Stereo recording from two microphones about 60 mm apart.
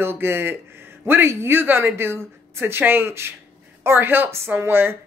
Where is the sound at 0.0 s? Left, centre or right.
Right.